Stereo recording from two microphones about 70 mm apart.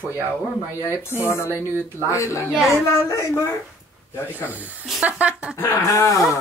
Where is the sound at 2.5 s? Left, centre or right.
Centre.